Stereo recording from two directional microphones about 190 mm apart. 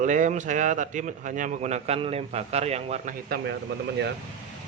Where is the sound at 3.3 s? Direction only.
60° right (ahead or behind).